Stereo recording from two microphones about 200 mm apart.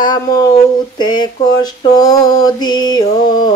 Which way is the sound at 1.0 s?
20° left (ahead or behind).